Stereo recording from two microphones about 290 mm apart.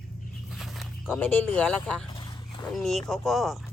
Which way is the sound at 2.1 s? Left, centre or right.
Centre.